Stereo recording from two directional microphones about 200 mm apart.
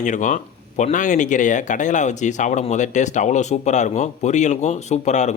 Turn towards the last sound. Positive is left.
turn(degrees=35)  # may be behind; listen again after turning